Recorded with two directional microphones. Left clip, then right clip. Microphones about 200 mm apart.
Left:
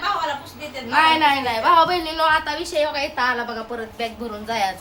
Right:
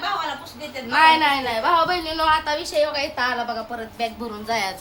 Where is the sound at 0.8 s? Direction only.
5° right (ahead or behind).